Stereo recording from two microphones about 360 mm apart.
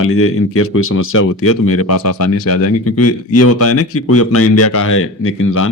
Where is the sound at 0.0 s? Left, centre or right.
Left.